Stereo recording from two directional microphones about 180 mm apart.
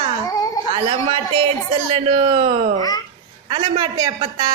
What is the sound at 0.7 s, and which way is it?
A man's voice, 30° right (ahead or behind).